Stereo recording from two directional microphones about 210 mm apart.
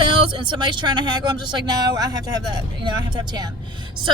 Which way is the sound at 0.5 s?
20° right (ahead or behind).